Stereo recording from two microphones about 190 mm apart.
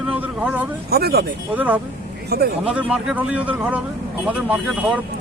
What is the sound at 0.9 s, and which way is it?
Speech, 55° right (ahead or behind).